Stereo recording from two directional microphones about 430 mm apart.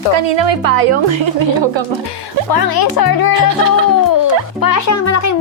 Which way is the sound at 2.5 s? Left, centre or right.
Left.